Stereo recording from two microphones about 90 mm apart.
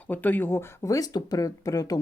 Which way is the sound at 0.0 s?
20° left (ahead or behind).